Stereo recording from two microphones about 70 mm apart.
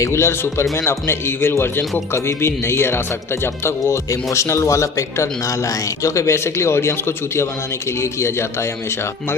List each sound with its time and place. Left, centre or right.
0.0 s speech: left